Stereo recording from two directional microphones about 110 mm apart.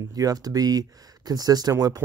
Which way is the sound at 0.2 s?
35° right (ahead or behind).